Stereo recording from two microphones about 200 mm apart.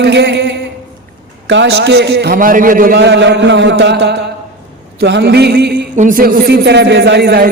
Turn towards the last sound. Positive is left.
turn(degrees=-55)  # may be behind; listen again after turning